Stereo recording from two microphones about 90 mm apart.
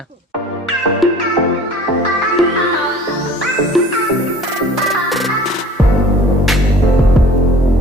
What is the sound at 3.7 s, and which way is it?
Music, centre (ahead or behind).